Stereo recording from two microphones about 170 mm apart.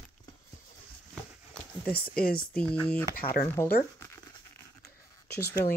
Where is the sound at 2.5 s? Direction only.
5° left (ahead or behind).